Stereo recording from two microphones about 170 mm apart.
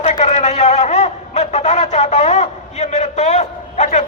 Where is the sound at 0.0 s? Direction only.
40° left (ahead or behind).